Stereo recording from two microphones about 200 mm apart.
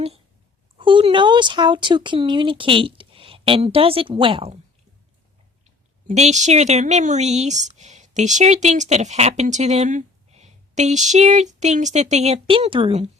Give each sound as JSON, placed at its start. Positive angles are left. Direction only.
{"t": 0.8, "sound": "speech", "side_deg": -25}
{"t": 6.1, "sound": "speech", "side_deg": -35}